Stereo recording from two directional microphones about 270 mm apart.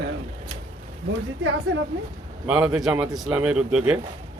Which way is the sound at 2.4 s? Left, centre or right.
Centre.